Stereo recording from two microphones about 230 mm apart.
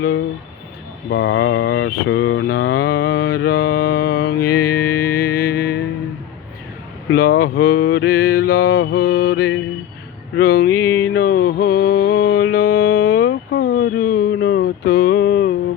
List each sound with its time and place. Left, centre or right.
1.1 s mantra: left
4.7 s music: centre
7.2 s mantra: left
10.7 s music: centre
11.1 s mantra: left
12.4 s mantra: left
12.7 s mantra: left
13.5 s a sound: left